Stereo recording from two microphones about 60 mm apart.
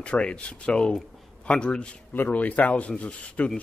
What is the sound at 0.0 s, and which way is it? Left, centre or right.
Speech, centre.